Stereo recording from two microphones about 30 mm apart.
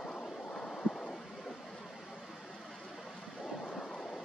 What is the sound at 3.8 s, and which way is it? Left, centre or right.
Vehicle, left.